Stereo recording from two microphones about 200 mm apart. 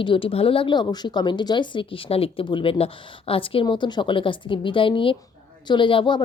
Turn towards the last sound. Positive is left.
turn(degrees=25)  # may be behind; listen again after turning